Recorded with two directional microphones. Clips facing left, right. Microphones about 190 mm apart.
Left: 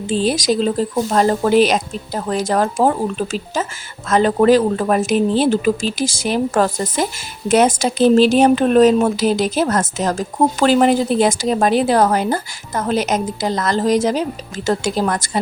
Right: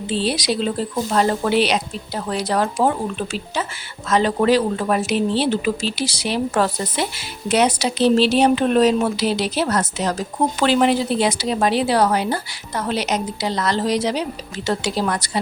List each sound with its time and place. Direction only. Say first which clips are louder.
0.1 s speech: left 4 dB; 45° left (ahead or behind)